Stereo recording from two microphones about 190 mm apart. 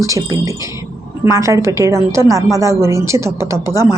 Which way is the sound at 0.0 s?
15° right (ahead or behind).